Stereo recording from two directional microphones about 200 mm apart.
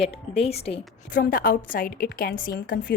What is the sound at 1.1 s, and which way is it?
A woman's voice, 45° left (ahead or behind).